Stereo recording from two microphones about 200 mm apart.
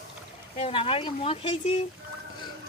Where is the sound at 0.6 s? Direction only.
30° left (ahead or behind).